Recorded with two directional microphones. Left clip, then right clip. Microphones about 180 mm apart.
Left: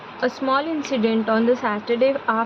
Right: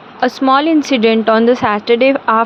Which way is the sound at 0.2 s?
55° right (ahead or behind).